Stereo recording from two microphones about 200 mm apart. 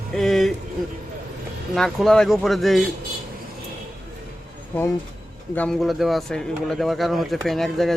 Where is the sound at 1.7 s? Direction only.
Centre (ahead or behind).